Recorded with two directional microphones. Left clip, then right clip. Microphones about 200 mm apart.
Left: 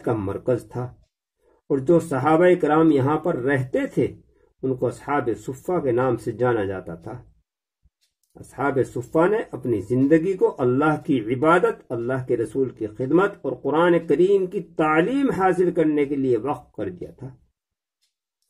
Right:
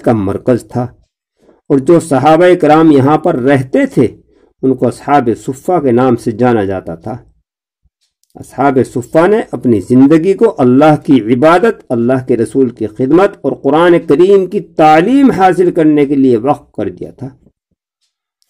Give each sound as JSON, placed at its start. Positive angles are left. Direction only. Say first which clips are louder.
{"t": 0.0, "sound": "speech", "louder": "right 12 dB", "side_deg": -40}
{"t": 8.4, "sound": "speech", "louder": "right 12 dB", "side_deg": -40}